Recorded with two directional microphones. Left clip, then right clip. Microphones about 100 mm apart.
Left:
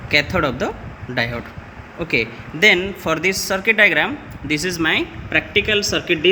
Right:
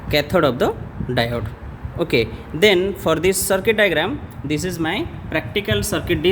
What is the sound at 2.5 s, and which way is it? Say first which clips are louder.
Speech: left 1 dB; 90° right.